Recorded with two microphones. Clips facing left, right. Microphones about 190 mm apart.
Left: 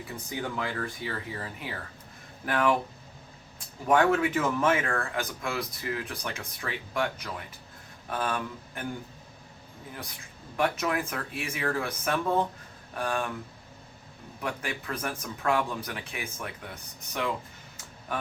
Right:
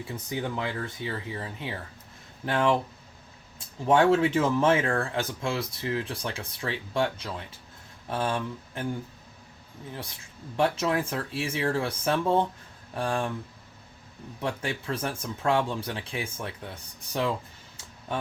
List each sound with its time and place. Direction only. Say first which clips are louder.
0.3 s speech: right 2 dB; 25° right (ahead or behind)
3.8 s speech: right 2 dB; 25° right (ahead or behind)
9.9 s speech: right 2 dB; 25° right (ahead or behind)
14.4 s speech: right 3 dB; 30° right (ahead or behind)